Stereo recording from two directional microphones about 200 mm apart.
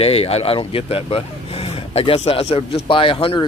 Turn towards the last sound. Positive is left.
turn(degrees=25)  # may be behind; listen again after turning